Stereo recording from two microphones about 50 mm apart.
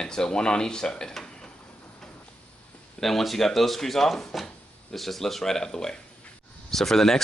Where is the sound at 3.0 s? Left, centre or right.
Centre.